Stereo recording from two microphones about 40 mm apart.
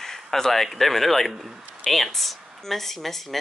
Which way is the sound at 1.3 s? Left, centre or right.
Centre.